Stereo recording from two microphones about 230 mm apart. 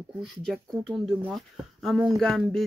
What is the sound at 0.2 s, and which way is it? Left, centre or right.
Speech, centre.